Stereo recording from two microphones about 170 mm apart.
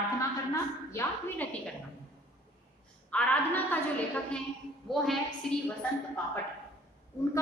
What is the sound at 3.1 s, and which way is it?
A woman's voice, 10° left (ahead or behind).